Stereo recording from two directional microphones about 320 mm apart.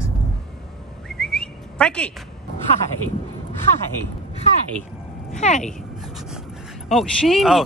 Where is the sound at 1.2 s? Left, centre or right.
Centre.